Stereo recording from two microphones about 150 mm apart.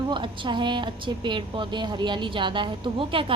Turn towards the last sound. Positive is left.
turn(degrees=-35)  # may be behind; listen again after turning